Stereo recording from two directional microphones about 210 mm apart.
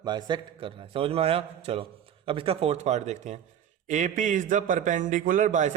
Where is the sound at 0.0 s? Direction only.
20° right (ahead or behind).